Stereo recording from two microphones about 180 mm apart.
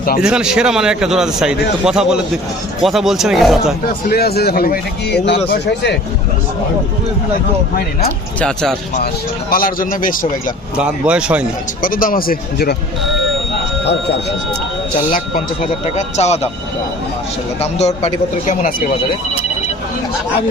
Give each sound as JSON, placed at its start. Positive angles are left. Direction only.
{"t": 0.2, "sound": "a man's voice", "side_deg": -5}
{"t": 3.8, "sound": "speech", "side_deg": 60}
{"t": 8.4, "sound": "a man's voice", "side_deg": 5}
{"t": 9.5, "sound": "a man's voice", "side_deg": 50}
{"t": 10.8, "sound": "speech", "side_deg": -5}
{"t": 11.8, "sound": "a man's voice", "side_deg": 50}
{"t": 16.0, "sound": "speech", "side_deg": 40}
{"t": 17.6, "sound": "speech", "side_deg": 40}